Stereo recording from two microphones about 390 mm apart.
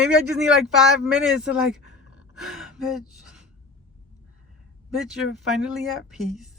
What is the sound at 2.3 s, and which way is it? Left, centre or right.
Gasp, centre.